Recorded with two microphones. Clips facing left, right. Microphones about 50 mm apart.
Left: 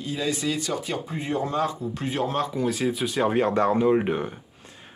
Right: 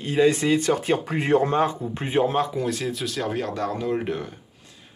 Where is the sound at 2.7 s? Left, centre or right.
Centre.